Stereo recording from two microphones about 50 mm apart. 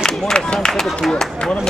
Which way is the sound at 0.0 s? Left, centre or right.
Centre.